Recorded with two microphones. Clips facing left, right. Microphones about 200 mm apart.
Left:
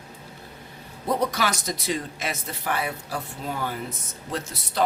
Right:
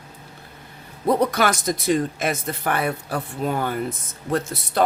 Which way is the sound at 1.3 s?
55° right (ahead or behind).